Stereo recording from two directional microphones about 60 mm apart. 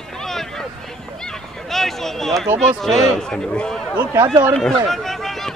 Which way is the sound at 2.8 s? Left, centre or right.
Centre.